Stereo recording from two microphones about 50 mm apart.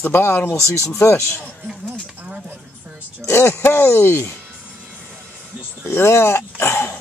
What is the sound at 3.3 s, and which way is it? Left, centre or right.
Speech, left.